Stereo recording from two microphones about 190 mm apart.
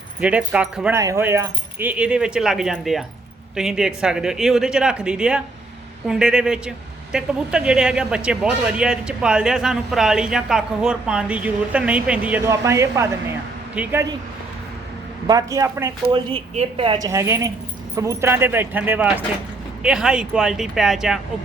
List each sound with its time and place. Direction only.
0.2 s speech: 5° right (ahead or behind)
0.9 s speech: 15° right (ahead or behind)
15.3 s speech: 20° right (ahead or behind)
16.1 s a woman's voice: 30° right (ahead or behind); by 21.2 s centre (ahead or behind)